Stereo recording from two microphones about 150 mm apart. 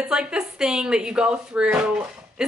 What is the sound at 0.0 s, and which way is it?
Speech, 5° right (ahead or behind).